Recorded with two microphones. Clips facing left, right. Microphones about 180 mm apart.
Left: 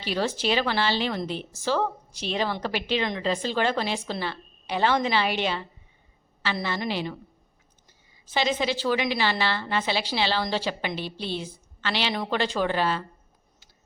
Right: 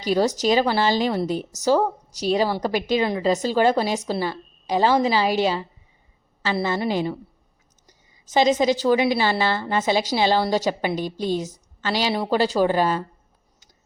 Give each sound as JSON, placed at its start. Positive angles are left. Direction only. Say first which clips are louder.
{"t": 0.0, "sound": "a woman's voice", "louder": "right 7 dB", "side_deg": -40}
{"t": 8.3, "sound": "a woman's voice", "louder": "right 7 dB", "side_deg": -45}